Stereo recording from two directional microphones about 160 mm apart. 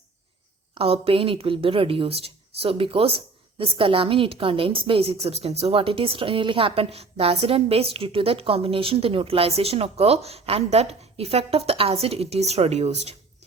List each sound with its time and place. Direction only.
0.7 s a woman's voice: 35° right (ahead or behind)